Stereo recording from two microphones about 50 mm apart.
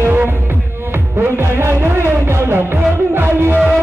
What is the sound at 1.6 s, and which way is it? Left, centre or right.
Music, right.